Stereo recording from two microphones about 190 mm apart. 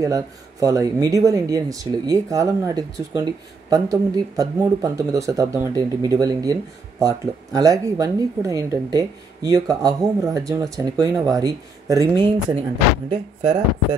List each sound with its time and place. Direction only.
0.0 s speech: 20° right (ahead or behind)